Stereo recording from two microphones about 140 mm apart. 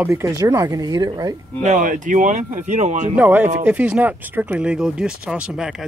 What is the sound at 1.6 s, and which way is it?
Speech, 65° right (ahead or behind).